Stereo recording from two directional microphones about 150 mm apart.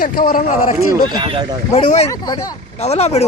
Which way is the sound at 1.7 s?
45° left (ahead or behind).